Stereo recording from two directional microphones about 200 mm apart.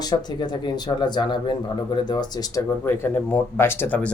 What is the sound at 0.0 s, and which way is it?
Speech, 20° left (ahead or behind).